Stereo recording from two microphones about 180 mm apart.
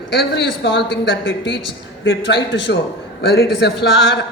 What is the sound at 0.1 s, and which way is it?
A woman's voice, 80° left.